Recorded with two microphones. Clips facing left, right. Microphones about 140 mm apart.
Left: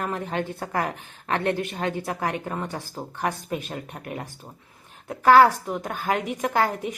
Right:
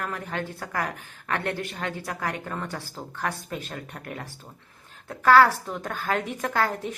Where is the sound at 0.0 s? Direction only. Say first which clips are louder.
Left 4 dB; 20° left (ahead or behind).